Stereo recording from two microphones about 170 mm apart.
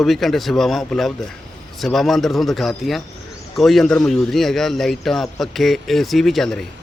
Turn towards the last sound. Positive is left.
turn(degrees=0)  # may be behind; listen again after turning